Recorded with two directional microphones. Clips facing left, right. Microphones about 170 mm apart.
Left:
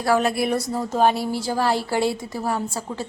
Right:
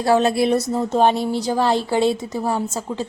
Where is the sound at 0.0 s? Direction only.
25° right (ahead or behind).